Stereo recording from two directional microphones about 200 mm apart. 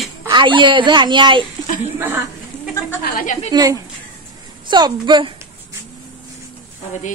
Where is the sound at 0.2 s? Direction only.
25° right (ahead or behind).